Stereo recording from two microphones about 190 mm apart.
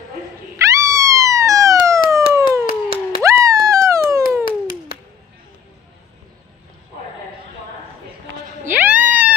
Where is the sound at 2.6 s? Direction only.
50° left (ahead or behind).